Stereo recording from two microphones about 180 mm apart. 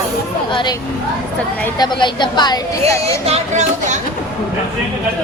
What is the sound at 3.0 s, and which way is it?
Speech, 35° right (ahead or behind).